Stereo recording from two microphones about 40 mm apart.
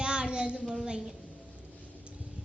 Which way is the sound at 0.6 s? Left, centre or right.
Centre.